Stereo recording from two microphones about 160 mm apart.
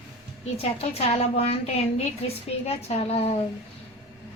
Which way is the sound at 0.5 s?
40° left (ahead or behind).